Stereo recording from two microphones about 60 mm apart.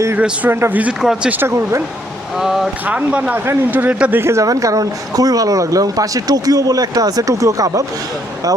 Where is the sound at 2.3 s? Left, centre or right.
Centre.